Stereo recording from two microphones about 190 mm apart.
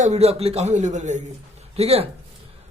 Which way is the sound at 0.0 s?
35° right (ahead or behind).